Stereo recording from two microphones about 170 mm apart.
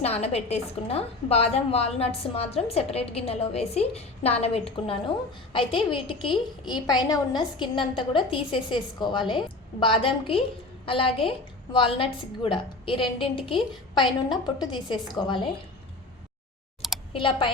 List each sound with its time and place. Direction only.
0.0 s a woman's voice: 40° left (ahead or behind)
17.1 s speech: 30° left (ahead or behind)